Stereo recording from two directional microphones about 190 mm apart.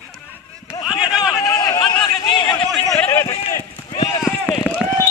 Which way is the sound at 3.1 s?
15° left (ahead or behind).